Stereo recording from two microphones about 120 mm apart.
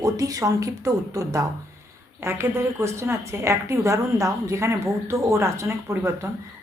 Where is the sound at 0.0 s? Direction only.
30° right (ahead or behind).